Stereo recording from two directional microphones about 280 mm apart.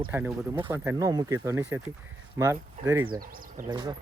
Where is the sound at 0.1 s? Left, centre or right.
Centre.